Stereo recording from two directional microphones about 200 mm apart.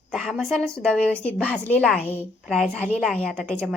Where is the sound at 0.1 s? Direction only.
Centre (ahead or behind).